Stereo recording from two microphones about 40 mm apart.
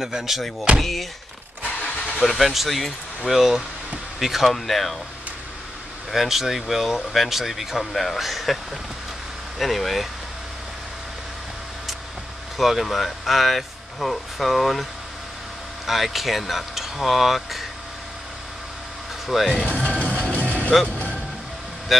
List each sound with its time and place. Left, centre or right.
0.0 s speech: centre
0.7 s speech: centre
1.8 s vehicle: left
2.2 s speech: centre
6.1 s speech: centre
9.6 s speech: centre
12.5 s speech: centre
15.9 s speech: centre
19.2 s speech: centre
19.8 s music: left